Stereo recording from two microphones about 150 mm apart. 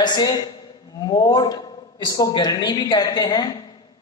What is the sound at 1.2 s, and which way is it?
A man's voice, 25° left (ahead or behind).